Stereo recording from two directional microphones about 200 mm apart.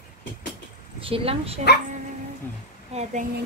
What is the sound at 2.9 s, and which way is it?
Speech, 30° right (ahead or behind).